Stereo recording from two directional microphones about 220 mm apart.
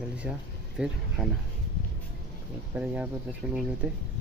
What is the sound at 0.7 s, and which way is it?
Speech, centre (ahead or behind).